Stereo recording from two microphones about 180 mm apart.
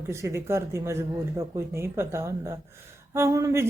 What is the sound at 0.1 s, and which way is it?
Speech, 15° right (ahead or behind).